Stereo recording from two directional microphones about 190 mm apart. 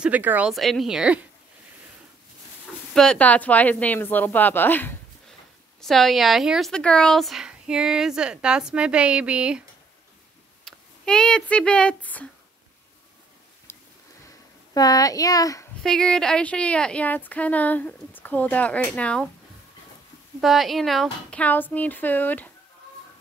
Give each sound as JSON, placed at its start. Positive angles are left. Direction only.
{"t": 0.0, "sound": "speech", "side_deg": -10}
{"t": 2.9, "sound": "speech", "side_deg": 5}
{"t": 10.6, "sound": "speech", "side_deg": 5}
{"t": 13.7, "sound": "a sound", "side_deg": 15}
{"t": 14.7, "sound": "speech", "side_deg": 20}
{"t": 15.8, "sound": "speech", "side_deg": 5}
{"t": 20.3, "sound": "speech", "side_deg": 0}